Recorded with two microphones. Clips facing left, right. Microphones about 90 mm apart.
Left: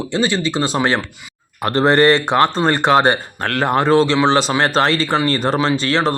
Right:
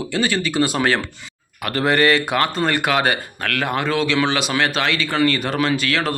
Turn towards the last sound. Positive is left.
turn(degrees=30)  # may be behind; listen again after turning